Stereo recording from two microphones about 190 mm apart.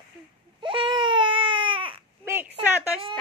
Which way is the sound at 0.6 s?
25° right (ahead or behind).